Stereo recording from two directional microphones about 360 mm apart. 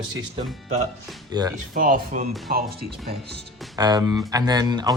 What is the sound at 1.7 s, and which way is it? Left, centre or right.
Speech, right.